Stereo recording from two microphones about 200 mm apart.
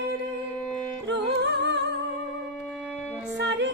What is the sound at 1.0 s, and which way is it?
Music, 60° right (ahead or behind).